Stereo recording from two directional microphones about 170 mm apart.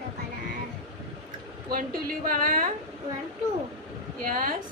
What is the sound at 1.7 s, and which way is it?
Speech, 55° right (ahead or behind).